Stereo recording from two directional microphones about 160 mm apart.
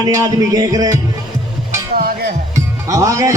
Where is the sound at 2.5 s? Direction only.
20° right (ahead or behind).